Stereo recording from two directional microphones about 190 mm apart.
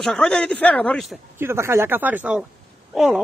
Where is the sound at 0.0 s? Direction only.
Centre (ahead or behind).